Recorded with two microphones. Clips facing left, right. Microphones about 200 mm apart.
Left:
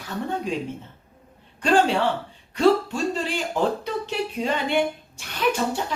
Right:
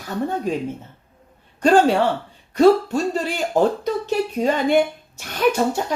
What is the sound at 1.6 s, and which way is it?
A woman's voice, 40° right (ahead or behind).